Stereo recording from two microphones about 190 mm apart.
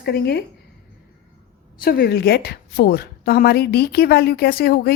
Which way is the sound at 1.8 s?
55° left (ahead or behind).